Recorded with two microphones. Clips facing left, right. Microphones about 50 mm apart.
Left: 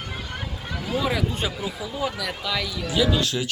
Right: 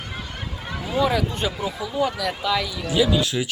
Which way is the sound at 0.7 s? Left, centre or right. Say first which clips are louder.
Right 4 dB; centre.